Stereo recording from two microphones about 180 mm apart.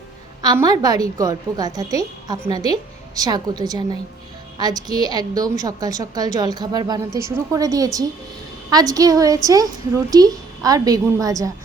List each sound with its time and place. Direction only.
0.4 s a woman's voice: 20° right (ahead or behind)